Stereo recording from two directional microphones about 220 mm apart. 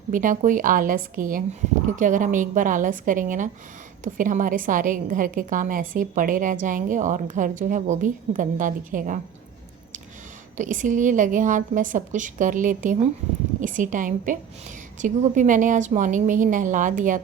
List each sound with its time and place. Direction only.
0.1 s a woman's voice: 35° right (ahead or behind)
10.6 s a woman's voice: 35° right (ahead or behind)